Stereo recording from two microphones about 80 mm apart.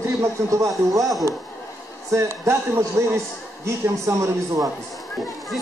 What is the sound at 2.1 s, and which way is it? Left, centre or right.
A man's voice, right.